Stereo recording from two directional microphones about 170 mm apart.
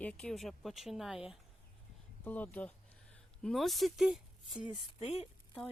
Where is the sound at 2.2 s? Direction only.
10° left (ahead or behind).